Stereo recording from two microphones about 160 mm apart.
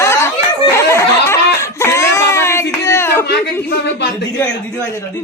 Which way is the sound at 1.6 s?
15° left (ahead or behind).